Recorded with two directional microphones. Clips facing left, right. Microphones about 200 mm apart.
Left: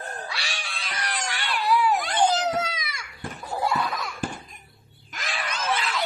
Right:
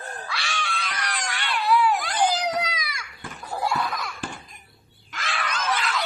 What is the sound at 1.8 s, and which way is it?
Baby cry, 25° left (ahead or behind).